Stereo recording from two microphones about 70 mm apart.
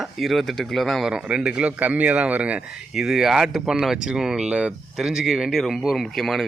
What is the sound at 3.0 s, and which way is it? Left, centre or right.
Speech, centre.